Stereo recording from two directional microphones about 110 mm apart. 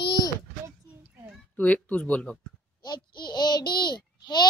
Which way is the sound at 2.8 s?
40° left (ahead or behind).